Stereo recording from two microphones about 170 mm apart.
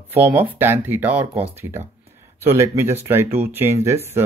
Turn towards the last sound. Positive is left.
turn(degrees=-15)  # may be behind; listen again after turning